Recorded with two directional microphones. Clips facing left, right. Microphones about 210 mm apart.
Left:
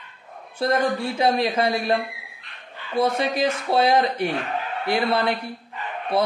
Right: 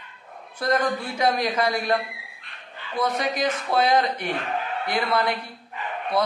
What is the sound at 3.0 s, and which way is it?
Speech, 30° left (ahead or behind).